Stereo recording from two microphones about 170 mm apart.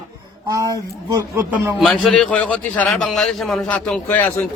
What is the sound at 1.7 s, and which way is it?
A man's voice, centre (ahead or behind).